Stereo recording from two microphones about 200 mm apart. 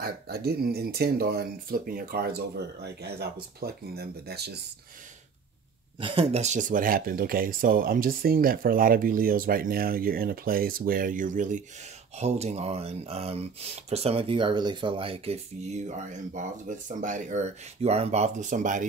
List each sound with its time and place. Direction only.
0.0 s speech: 50° right (ahead or behind)
5.9 s speech: 25° right (ahead or behind)